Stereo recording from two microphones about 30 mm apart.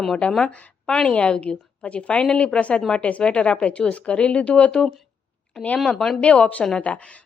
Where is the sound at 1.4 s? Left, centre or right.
Left.